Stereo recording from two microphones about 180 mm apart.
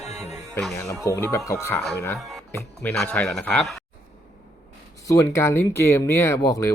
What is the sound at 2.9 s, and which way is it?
Speech, 5° left (ahead or behind).